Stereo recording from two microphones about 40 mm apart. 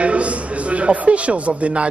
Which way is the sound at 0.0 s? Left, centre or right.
Right.